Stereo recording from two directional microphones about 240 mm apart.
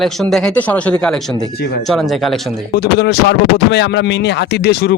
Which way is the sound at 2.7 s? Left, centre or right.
Left.